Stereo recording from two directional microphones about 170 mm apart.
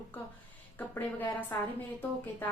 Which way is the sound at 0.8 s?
10° left (ahead or behind).